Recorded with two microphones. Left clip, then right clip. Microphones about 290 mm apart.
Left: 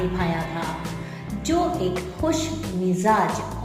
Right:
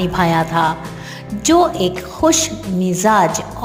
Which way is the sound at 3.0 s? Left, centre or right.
Right.